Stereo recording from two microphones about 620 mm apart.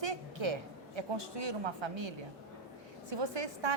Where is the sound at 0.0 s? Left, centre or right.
Right.